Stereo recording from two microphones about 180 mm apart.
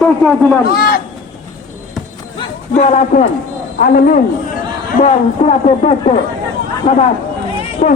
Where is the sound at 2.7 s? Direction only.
40° left (ahead or behind).